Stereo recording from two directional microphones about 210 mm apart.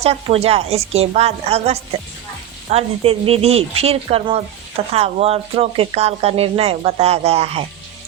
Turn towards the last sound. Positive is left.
turn(degrees=-30)  # may be behind; listen again after turning